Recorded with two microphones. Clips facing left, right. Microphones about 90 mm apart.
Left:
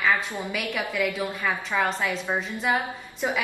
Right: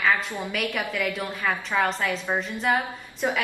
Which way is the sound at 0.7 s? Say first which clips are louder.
Left 1 dB; 5° left (ahead or behind).